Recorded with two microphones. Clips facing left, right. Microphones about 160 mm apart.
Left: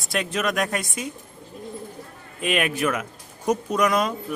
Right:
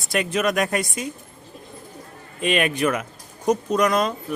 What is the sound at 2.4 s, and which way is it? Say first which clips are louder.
A man's voice: right 2 dB; 5° left (ahead or behind).